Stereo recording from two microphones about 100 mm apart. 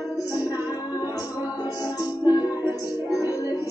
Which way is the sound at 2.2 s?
40° left (ahead or behind).